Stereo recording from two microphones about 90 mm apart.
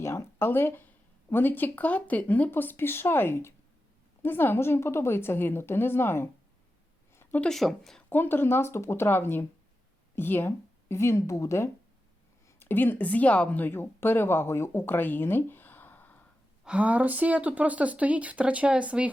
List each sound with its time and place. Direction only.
0.0 s speech: 25° left (ahead or behind)
7.2 s a sound: 20° left (ahead or behind)
7.4 s speech: centre (ahead or behind)
8.1 s a woman's voice: 25° left (ahead or behind)
16.6 s speech: 15° right (ahead or behind)